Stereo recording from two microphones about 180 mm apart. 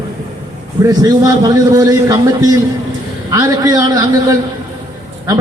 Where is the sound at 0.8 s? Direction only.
20° right (ahead or behind).